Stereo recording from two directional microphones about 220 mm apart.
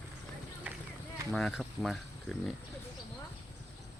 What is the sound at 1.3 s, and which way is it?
Speech, centre (ahead or behind).